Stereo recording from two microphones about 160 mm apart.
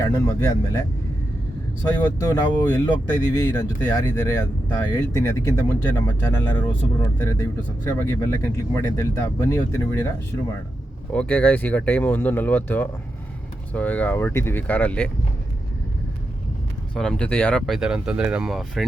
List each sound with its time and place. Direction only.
0.0 s speech: 15° left (ahead or behind)
2.0 s speech: 20° left (ahead or behind)
11.1 s speech: 10° left (ahead or behind)
16.9 s speech: 5° left (ahead or behind)
17.7 s speech: 5° right (ahead or behind)